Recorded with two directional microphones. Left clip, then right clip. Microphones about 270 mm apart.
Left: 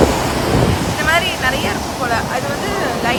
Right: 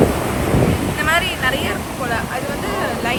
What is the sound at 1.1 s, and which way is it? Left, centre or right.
Vehicle, centre.